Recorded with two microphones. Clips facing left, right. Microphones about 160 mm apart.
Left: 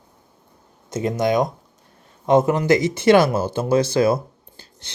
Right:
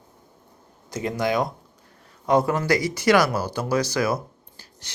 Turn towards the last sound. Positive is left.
turn(degrees=25)  # may be behind; listen again after turning